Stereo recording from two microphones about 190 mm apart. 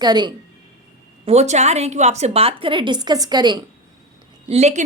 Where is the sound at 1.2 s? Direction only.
35° right (ahead or behind).